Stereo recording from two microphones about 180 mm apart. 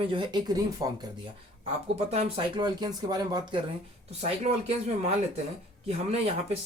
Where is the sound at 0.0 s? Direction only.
25° right (ahead or behind).